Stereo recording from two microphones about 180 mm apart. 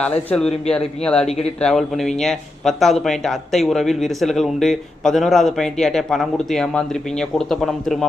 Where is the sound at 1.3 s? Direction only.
35° left (ahead or behind).